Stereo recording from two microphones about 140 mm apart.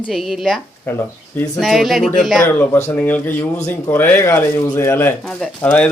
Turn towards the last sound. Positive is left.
turn(degrees=5)  # may be behind; listen again after turning